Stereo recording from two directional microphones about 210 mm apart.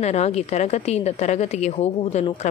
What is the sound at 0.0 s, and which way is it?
A woman's voice, 30° left (ahead or behind).